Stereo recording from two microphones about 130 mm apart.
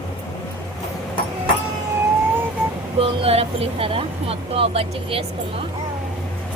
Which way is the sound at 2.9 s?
45° right (ahead or behind).